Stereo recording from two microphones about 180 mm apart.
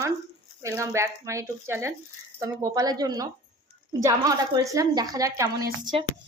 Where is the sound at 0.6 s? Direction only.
15° right (ahead or behind).